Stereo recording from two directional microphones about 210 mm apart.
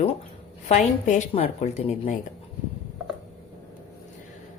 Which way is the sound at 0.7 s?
35° left (ahead or behind).